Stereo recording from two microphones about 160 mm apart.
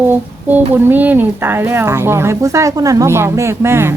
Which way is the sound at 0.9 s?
10° right (ahead or behind).